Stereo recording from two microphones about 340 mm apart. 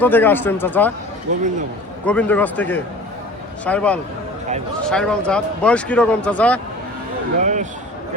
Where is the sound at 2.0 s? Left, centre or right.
Centre.